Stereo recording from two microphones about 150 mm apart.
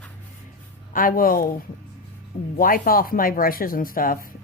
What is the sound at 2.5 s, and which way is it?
Speech, 70° left (ahead or behind).